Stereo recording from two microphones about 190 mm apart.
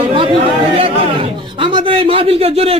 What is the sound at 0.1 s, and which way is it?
A man's voice, 30° right (ahead or behind).